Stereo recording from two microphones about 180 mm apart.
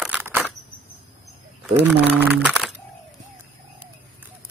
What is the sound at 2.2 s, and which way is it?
Speech, 10° right (ahead or behind).